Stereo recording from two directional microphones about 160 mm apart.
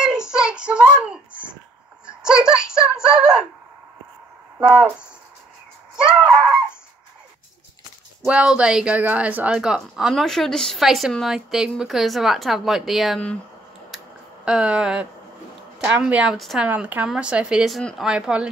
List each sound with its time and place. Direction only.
0.0 s a sound: 5° right (ahead or behind)
4.6 s speech: 5° right (ahead or behind)
6.0 s fowl: 5° right (ahead or behind)
8.2 s speech: 5° right (ahead or behind)
13.9 s a sound: 5° right (ahead or behind)
15.8 s speech: 10° right (ahead or behind)